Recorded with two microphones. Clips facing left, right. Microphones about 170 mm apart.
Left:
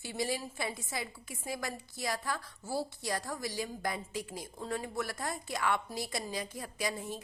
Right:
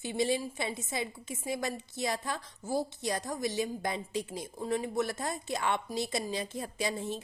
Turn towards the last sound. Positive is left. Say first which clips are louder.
# right 3 dB
turn(degrees=-25)  # may be behind; listen again after turning